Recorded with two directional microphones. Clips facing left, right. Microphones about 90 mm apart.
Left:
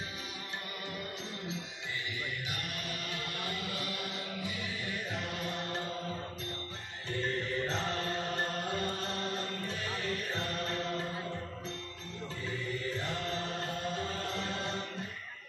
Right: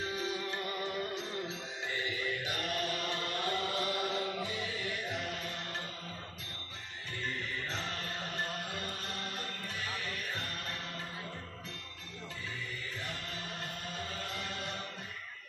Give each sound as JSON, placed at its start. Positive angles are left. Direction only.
{"t": 2.0, "sound": "chant", "side_deg": -35}
{"t": 7.2, "sound": "music", "side_deg": 35}
{"t": 10.3, "sound": "mantra", "side_deg": 35}
{"t": 14.2, "sound": "music", "side_deg": 30}